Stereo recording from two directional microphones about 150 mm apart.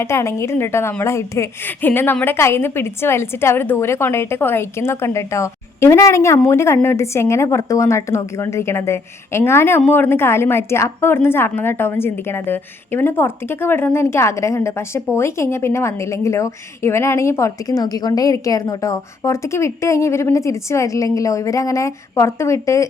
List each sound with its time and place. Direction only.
0.0 s a woman's voice: 20° left (ahead or behind)